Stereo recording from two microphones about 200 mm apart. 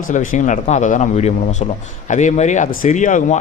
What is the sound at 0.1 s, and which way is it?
A man's voice, 40° left (ahead or behind).